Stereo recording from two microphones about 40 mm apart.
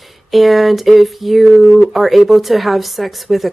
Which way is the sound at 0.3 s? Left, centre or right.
Centre.